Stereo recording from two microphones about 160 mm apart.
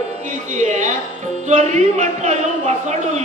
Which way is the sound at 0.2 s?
50° right (ahead or behind).